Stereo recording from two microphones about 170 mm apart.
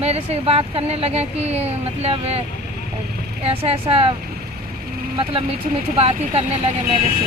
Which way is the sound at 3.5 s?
35° right (ahead or behind).